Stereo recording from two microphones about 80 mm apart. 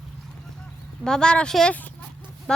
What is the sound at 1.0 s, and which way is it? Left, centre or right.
Speech, centre.